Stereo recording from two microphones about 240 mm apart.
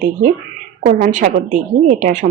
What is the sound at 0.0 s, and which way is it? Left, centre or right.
Speech, right.